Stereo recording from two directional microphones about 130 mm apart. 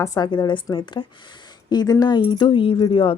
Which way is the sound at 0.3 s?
35° left (ahead or behind).